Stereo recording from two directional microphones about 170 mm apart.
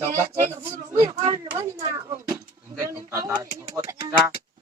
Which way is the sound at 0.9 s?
20° right (ahead or behind).